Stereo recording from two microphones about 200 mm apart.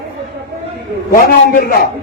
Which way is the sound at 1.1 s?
45° left (ahead or behind).